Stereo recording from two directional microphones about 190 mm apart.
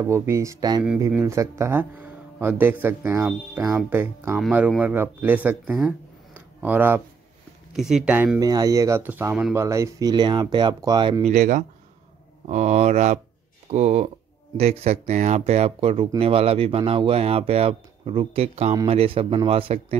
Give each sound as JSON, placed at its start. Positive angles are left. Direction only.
{"t": 0.0, "sound": "speech", "side_deg": -15}
{"t": 8.4, "sound": "speech", "side_deg": -20}
{"t": 11.2, "sound": "speech", "side_deg": -40}